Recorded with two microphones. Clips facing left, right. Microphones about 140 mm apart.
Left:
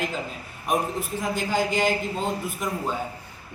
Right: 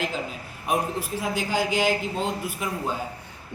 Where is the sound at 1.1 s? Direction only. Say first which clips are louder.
Left 1 dB; 5° right (ahead or behind).